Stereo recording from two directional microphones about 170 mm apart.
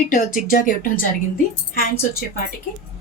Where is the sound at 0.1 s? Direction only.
50° left (ahead or behind).